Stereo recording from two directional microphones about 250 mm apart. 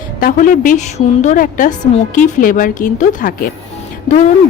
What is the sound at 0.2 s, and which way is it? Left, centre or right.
Speech, left.